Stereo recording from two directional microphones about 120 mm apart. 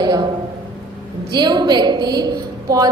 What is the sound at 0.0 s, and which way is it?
Speech, 35° right (ahead or behind).